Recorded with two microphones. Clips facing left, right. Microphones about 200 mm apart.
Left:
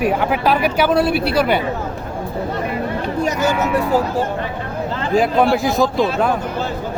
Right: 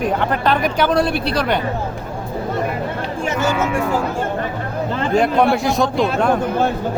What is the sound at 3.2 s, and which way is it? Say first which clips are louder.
Speech: left 1 dB; 40° left (ahead or behind).